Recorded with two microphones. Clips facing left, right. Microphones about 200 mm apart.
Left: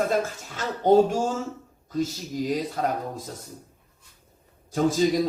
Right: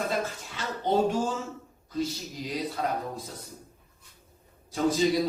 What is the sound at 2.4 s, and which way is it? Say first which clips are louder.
Speech: left 11 dB; 45° left (ahead or behind).